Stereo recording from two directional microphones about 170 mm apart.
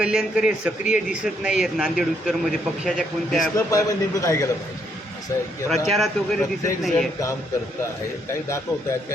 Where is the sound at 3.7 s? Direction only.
20° left (ahead or behind).